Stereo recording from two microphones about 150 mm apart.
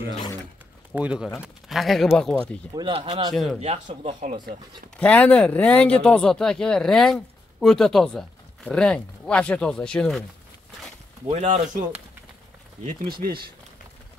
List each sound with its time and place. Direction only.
0.9 s speech: 10° right (ahead or behind)
2.7 s speech: 35° right (ahead or behind)
3.6 s speech: 45° right (ahead or behind)
4.9 s speech: 10° left (ahead or behind)
11.2 s speech: 50° right (ahead or behind)
12.8 s speech: 85° right